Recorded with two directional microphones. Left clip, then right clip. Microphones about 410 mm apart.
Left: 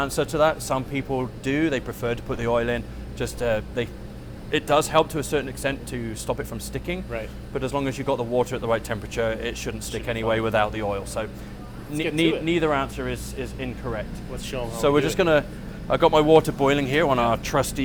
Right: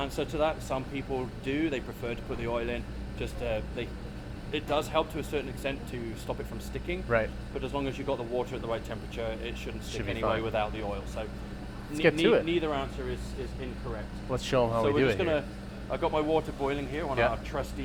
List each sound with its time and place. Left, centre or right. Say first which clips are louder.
0.0 s speech: left 8 dB; left
12.5 s speech: left 8 dB; left
14.3 s speech: right 5 dB; right
14.8 s speech: left 6 dB; left